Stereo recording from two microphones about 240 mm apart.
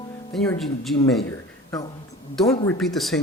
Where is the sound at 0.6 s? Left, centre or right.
Centre.